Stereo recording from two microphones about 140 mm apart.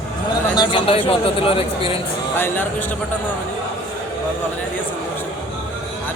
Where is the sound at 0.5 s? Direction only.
35° left (ahead or behind).